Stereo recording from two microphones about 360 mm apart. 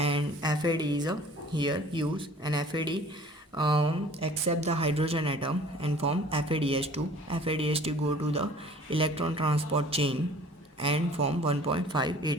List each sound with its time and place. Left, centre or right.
0.0 s speech: centre